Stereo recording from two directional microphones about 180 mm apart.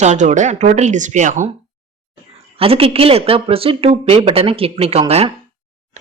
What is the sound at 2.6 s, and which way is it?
Speech, 30° right (ahead or behind).